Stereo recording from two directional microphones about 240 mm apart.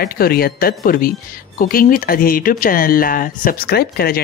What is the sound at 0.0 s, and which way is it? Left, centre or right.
Speech, left.